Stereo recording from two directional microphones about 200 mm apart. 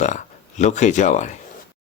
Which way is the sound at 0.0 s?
35° left (ahead or behind).